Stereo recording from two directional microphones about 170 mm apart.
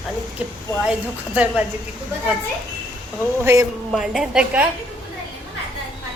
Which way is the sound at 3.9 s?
Centre (ahead or behind).